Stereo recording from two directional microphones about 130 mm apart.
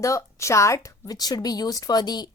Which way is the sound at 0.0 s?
25° left (ahead or behind).